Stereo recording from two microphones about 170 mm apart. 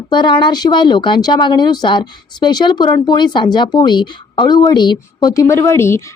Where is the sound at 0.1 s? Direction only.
25° left (ahead or behind).